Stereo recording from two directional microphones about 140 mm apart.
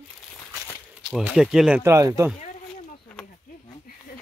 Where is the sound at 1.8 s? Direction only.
20° right (ahead or behind).